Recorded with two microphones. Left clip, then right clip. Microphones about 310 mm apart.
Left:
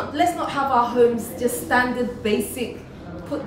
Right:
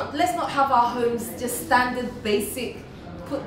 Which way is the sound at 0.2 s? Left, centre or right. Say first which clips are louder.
Left 1 dB; centre.